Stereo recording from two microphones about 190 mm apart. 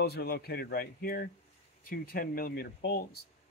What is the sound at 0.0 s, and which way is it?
Speech, 55° left (ahead or behind).